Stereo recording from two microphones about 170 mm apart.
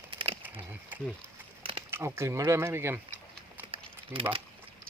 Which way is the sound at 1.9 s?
15° right (ahead or behind).